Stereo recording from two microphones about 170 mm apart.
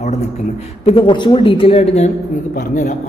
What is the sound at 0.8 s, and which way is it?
A woman's voice, 30° left (ahead or behind).